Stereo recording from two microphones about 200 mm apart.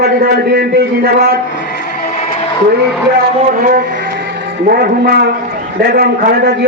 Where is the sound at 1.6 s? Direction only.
50° left (ahead or behind).